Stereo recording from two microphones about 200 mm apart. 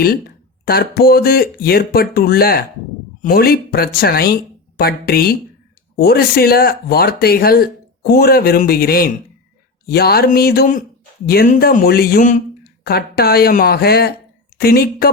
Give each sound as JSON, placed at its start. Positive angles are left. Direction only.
{"t": 0.6, "sound": "speech", "side_deg": 50}